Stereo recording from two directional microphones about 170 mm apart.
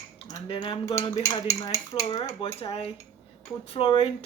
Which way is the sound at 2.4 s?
35° left (ahead or behind).